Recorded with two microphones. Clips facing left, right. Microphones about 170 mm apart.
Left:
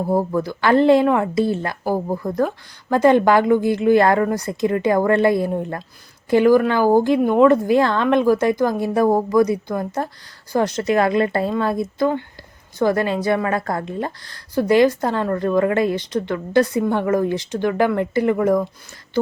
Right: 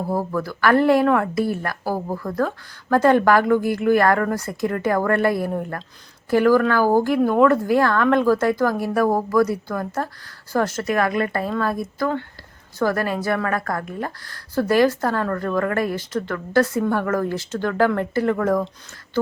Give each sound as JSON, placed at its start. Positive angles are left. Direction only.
{"t": 0.1, "sound": "a woman's voice", "side_deg": 20}